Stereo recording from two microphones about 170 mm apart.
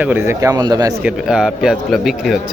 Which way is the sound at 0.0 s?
10° right (ahead or behind).